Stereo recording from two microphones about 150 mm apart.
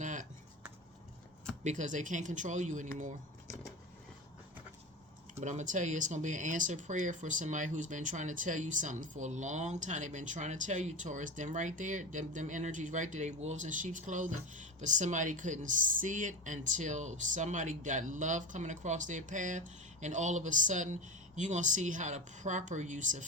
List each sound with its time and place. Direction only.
0.0 s a sound: 55° right (ahead or behind)
1.6 s speech: 55° right (ahead or behind)
5.3 s speech: 50° right (ahead or behind)